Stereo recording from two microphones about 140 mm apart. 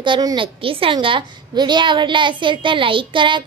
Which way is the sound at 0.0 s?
30° right (ahead or behind).